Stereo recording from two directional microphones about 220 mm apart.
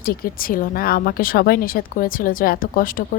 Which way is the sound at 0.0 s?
40° left (ahead or behind).